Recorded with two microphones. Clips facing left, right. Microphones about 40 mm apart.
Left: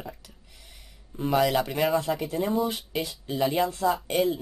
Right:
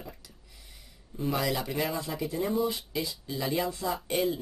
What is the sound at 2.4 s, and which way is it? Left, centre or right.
Speech, left.